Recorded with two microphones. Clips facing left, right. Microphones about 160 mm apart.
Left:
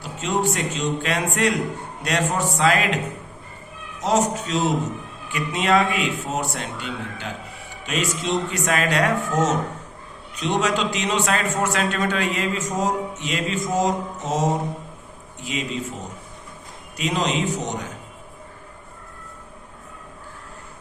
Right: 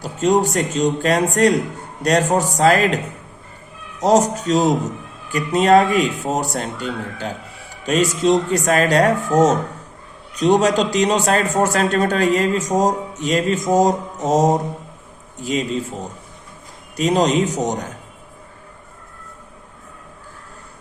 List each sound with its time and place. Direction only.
0.0 s a man's voice: 40° right (ahead or behind)
4.0 s a man's voice: 40° right (ahead or behind)